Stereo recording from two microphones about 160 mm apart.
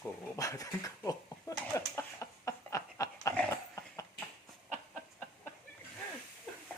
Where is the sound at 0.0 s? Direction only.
20° left (ahead or behind).